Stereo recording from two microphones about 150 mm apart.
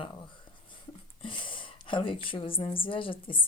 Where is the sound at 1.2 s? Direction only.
35° left (ahead or behind).